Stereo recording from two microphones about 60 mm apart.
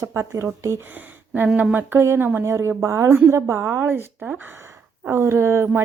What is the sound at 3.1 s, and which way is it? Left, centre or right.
Speech, right.